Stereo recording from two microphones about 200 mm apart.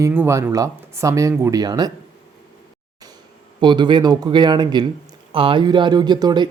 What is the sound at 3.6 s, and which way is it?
Speech, 20° right (ahead or behind).